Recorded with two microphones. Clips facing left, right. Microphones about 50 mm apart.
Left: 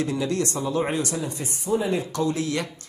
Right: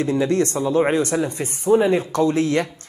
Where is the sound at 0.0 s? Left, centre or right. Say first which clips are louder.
Right 6 dB; right.